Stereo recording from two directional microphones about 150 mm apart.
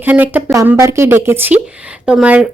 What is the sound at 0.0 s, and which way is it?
Speech, 10° right (ahead or behind).